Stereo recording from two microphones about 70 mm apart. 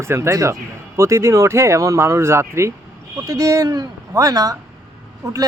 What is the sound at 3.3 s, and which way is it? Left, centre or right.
Speech, right.